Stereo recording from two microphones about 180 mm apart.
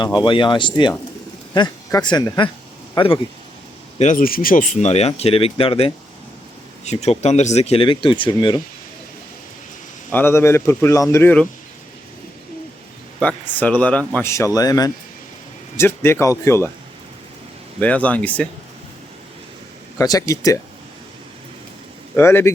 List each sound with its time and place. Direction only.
0.0 s speech: 25° left (ahead or behind)
3.9 s speech: 45° left (ahead or behind)
7.0 s speech: 35° left (ahead or behind)
10.1 s speech: 10° left (ahead or behind)
13.1 s speech: 10° left (ahead or behind)
17.7 s speech: 10° left (ahead or behind)
20.0 s speech: 20° left (ahead or behind)
22.1 s speech: 10° left (ahead or behind)